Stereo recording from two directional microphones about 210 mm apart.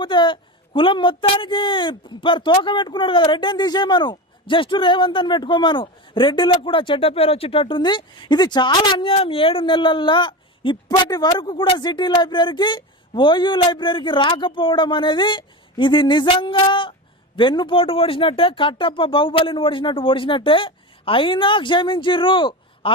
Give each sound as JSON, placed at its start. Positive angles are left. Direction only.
{"t": 0.0, "sound": "a woman's voice", "side_deg": 20}